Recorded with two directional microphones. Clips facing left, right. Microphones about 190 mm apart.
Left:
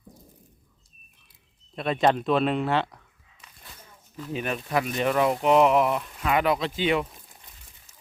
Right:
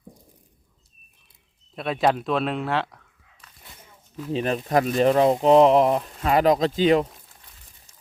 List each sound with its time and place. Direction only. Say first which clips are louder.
1.7 s speech: even; centre (ahead or behind)
4.3 s speech: right 5 dB; 30° right (ahead or behind)